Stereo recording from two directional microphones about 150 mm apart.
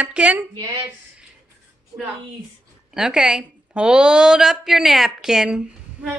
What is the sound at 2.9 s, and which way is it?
A woman's voice, 5° right (ahead or behind).